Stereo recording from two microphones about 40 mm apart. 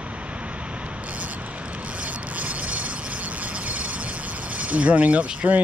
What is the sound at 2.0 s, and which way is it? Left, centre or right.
Mechanisms, right.